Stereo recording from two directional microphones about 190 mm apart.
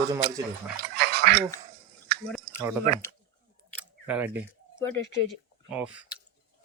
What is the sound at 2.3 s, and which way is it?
Chewing, 5° left (ahead or behind).